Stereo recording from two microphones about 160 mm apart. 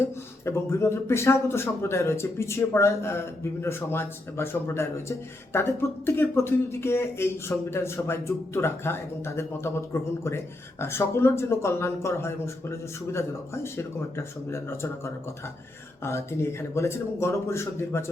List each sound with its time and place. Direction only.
0.0 s speech: 15° left (ahead or behind)